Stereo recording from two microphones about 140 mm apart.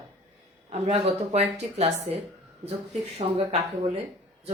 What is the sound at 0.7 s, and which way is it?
Speech, 45° right (ahead or behind).